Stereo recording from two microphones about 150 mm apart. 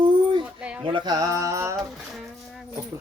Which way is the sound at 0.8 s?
30° right (ahead or behind).